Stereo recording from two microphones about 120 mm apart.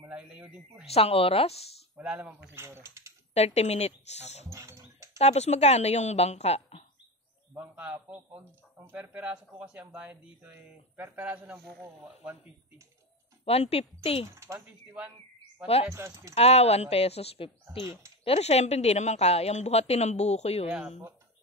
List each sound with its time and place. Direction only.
0.1 s speech: 5° right (ahead or behind)
0.9 s a woman's voice: 55° left (ahead or behind)
2.0 s speech: 10° right (ahead or behind)
3.3 s a woman's voice: 60° left (ahead or behind)
4.5 s music: 25° right (ahead or behind)
5.2 s a woman's voice: 65° left (ahead or behind)
7.5 s speech: 15° right (ahead or behind)
13.5 s a woman's voice: 60° left (ahead or behind)
14.2 s speech: 25° right (ahead or behind)
15.6 s a woman's voice: 55° left (ahead or behind)
15.9 s speech: 25° right (ahead or behind)
16.3 s a woman's voice: 60° left (ahead or behind)
17.6 s speech: 25° right (ahead or behind)
18.2 s a woman's voice: 60° left (ahead or behind)